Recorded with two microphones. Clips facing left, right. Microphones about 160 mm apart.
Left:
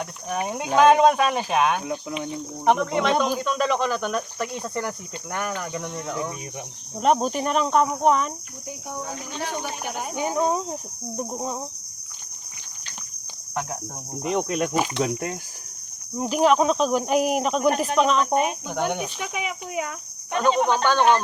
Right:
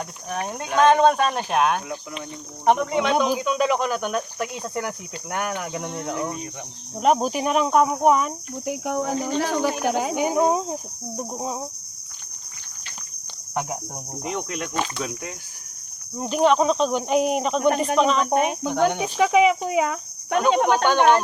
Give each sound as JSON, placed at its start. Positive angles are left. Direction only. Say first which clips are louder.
{"t": 0.3, "sound": "speech", "louder": "left 2 dB", "side_deg": 5}
{"t": 6.9, "sound": "speech", "louder": "right 1 dB", "side_deg": -5}
{"t": 8.6, "sound": "speech", "louder": "right 9 dB", "side_deg": -90}
{"t": 10.2, "sound": "speech", "louder": "even", "side_deg": -15}
{"t": 13.5, "sound": "speech", "louder": "right 2 dB", "side_deg": -10}
{"t": 14.2, "sound": "speech", "louder": "left 5 dB", "side_deg": 20}
{"t": 16.1, "sound": "speech", "louder": "even", "side_deg": 5}
{"t": 18.9, "sound": "speech", "louder": "right 12 dB", "side_deg": -90}
{"t": 20.8, "sound": "speech", "louder": "right 1 dB", "side_deg": -15}